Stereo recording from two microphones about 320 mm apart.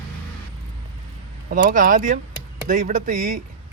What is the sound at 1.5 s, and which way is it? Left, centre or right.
Speech, right.